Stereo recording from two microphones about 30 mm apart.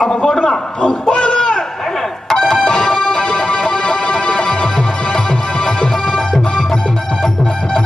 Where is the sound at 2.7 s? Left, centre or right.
Left.